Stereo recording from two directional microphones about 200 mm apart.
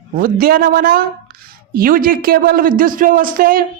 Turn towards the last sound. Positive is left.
turn(degrees=-45)  # may be behind; listen again after turning